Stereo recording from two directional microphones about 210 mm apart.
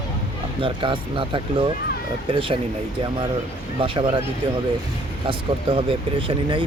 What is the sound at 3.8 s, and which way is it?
Speech, 25° right (ahead or behind).